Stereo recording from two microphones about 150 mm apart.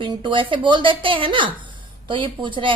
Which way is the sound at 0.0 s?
35° right (ahead or behind).